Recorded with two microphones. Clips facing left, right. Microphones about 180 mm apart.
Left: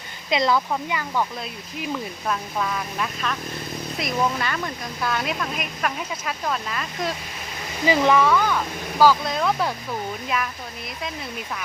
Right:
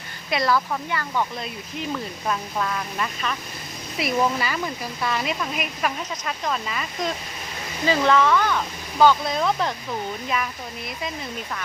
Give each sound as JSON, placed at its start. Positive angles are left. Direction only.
{"t": 0.3, "sound": "speech", "side_deg": 20}
{"t": 1.8, "sound": "speech", "side_deg": 0}
{"t": 7.9, "sound": "speech", "side_deg": 15}